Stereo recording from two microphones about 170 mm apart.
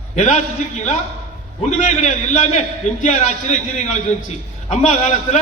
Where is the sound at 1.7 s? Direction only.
45° left (ahead or behind).